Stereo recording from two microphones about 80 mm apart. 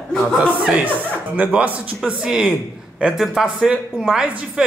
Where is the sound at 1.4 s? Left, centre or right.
Centre.